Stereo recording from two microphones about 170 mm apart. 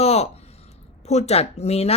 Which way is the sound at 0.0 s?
40° left (ahead or behind).